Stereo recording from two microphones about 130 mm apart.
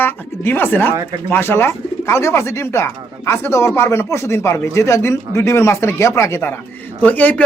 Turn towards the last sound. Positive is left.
turn(degrees=10)  # may be behind; listen again after turning